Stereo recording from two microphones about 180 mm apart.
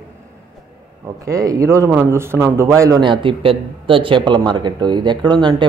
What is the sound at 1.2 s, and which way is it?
A man's voice, 20° right (ahead or behind).